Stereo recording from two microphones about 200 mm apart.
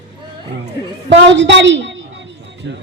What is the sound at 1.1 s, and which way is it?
Speech, 65° right (ahead or behind).